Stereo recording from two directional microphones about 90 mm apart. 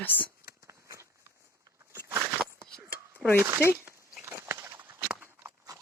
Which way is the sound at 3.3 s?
30° right (ahead or behind).